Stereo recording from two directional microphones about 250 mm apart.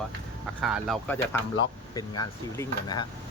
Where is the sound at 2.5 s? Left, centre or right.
Centre.